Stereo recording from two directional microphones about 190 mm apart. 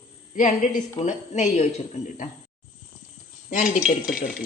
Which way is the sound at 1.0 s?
40° left (ahead or behind).